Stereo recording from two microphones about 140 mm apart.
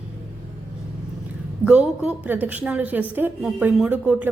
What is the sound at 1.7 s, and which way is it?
A woman's voice, 10° right (ahead or behind).